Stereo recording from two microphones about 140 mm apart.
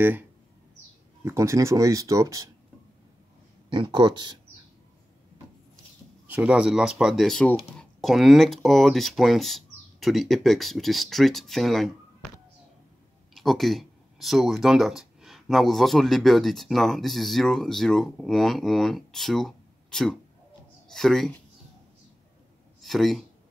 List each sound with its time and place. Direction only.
0.0 s speech: 15° right (ahead or behind)
3.7 s speech: 35° right (ahead or behind)
6.2 s speech: 10° right (ahead or behind)
13.3 s speech: centre (ahead or behind)
22.8 s speech: centre (ahead or behind)